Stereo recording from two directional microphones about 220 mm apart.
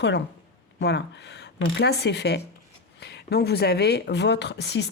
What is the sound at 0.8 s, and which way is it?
Speech, 50° left (ahead or behind).